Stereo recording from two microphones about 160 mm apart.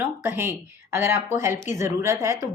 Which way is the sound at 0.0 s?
15° right (ahead or behind).